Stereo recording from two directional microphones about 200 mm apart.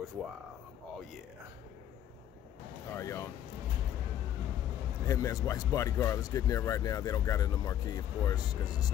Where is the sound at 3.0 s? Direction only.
15° left (ahead or behind).